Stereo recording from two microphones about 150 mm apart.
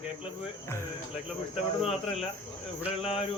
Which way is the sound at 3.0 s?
40° left (ahead or behind).